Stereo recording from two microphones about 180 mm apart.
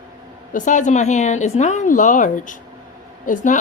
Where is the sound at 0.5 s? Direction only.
45° left (ahead or behind).